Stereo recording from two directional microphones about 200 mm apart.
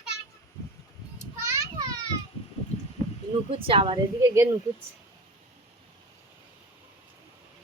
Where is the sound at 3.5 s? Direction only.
25° right (ahead or behind).